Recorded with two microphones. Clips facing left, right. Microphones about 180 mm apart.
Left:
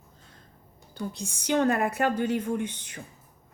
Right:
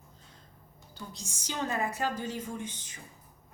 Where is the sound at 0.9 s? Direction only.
60° left (ahead or behind).